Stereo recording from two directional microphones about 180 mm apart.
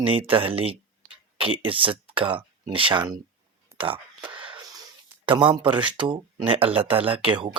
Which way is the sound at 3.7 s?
15° right (ahead or behind).